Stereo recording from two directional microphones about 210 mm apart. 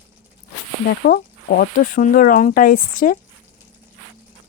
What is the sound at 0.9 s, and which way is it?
Speech, 45° left (ahead or behind).